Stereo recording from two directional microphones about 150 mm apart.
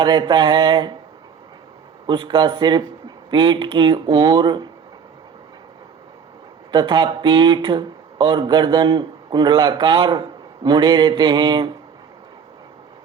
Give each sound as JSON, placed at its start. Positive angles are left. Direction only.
{"t": 0.0, "sound": "mantra", "side_deg": -30}
{"t": 2.0, "sound": "speech", "side_deg": -30}
{"t": 6.7, "sound": "speech", "side_deg": -30}